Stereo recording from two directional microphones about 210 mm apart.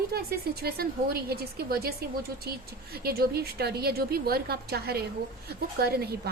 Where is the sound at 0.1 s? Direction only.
50° right (ahead or behind).